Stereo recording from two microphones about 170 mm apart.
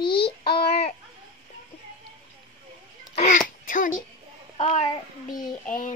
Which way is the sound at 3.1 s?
50° left (ahead or behind).